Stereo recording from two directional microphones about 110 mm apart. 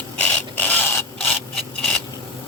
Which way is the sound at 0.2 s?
15° left (ahead or behind).